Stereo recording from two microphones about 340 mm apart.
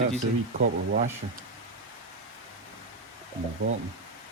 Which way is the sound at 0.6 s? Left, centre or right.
Right.